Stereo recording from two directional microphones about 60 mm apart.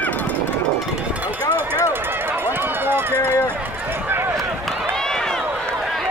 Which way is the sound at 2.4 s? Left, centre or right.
Right.